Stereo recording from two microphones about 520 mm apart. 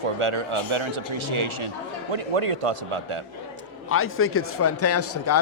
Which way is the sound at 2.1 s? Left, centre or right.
Right.